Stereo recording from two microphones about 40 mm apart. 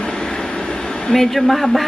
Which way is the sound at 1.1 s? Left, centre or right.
Centre.